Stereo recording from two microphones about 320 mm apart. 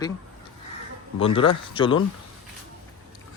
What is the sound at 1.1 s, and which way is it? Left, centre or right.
Speech, centre.